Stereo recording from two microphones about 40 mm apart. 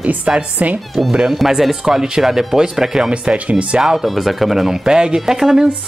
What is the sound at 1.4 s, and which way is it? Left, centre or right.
Speech, centre.